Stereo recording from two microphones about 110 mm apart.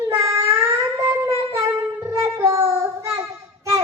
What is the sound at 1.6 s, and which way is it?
Wind instrument, 25° right (ahead or behind).